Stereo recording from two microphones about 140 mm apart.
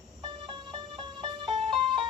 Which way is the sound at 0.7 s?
35° right (ahead or behind).